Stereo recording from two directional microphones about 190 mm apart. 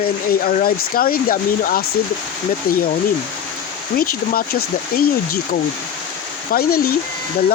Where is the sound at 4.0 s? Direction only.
50° left (ahead or behind).